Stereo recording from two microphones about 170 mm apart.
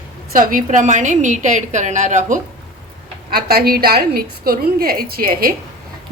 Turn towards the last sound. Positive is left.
turn(degrees=-60)  # may be behind; listen again after turning